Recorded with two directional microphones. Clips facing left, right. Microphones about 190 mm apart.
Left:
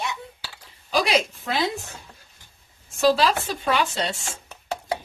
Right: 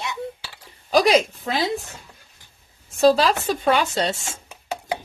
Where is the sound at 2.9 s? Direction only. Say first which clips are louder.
Right 3 dB; 40° right (ahead or behind).